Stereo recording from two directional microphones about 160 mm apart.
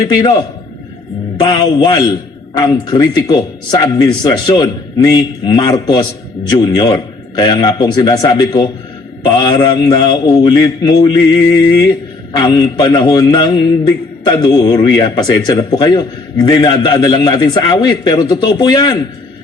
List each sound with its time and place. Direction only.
1.4 s a man's voice: 25° left (ahead or behind)